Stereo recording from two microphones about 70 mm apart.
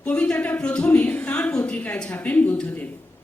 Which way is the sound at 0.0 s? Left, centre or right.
Centre.